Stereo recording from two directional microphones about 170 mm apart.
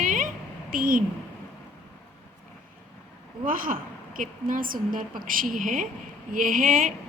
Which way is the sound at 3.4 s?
55° right (ahead or behind).